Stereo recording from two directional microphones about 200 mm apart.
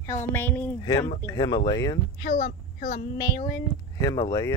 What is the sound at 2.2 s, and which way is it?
Speech, 45° left (ahead or behind).